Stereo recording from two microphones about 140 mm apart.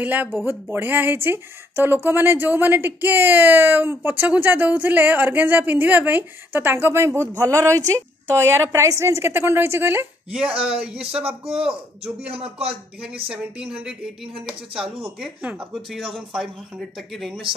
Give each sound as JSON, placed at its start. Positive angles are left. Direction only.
{"t": 0.0, "sound": "a woman's voice", "side_deg": -15}
{"t": 12.4, "sound": "a man's voice", "side_deg": -45}
{"t": 13.3, "sound": "speech", "side_deg": -5}